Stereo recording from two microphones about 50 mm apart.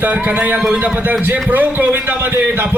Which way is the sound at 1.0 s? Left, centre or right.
Right.